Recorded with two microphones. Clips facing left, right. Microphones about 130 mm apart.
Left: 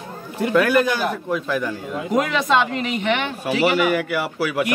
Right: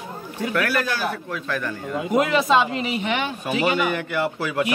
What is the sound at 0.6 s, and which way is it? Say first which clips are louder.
A man's voice: left 6 dB; 15° left (ahead or behind).